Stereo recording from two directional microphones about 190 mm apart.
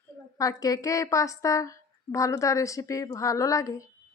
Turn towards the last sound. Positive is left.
turn(degrees=15)  # may be behind; listen again after turning